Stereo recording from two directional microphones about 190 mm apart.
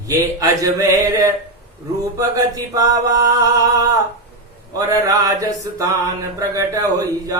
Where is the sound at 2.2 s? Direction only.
15° right (ahead or behind).